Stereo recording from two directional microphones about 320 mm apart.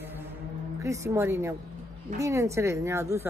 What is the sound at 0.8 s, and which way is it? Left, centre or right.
A woman's voice, centre.